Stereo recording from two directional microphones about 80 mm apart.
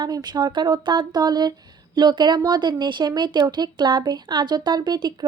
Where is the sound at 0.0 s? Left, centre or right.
Right.